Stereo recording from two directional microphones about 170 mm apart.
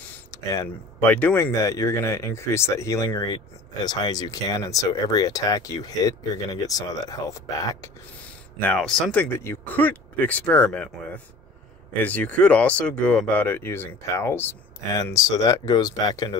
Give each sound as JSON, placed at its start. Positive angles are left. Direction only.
{"t": 0.3, "sound": "speech", "side_deg": 20}
{"t": 8.5, "sound": "speech", "side_deg": 5}
{"t": 12.0, "sound": "speech", "side_deg": 10}